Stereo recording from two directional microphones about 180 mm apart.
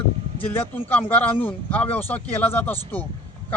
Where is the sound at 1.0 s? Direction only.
10° left (ahead or behind).